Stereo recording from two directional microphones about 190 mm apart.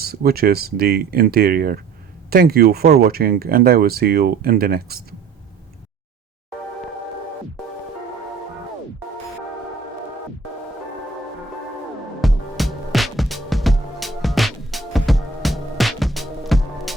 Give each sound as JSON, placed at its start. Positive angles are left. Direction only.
{"t": 0.0, "sound": "speech", "side_deg": -55}
{"t": 12.2, "sound": "music", "side_deg": 0}